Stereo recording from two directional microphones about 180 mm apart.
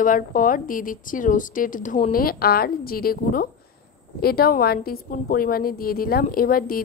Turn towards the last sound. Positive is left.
turn(degrees=55)  # may be behind; listen again after turning